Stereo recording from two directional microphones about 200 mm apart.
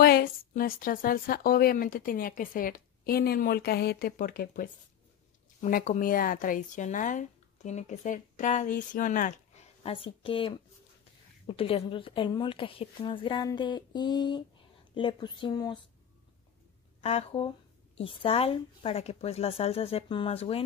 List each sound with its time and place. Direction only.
0.0 s a woman's voice: 50° left (ahead or behind)
9.8 s speech: 25° left (ahead or behind)
17.0 s speech: 30° left (ahead or behind)